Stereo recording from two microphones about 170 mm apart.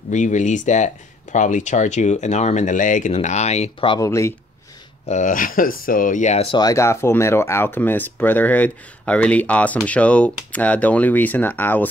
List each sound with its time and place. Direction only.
0.1 s speech: 45° left (ahead or behind)
4.0 s speech: 15° left (ahead or behind)
5.0 s speech: 45° left (ahead or behind); by 11.9 s 10° left (ahead or behind)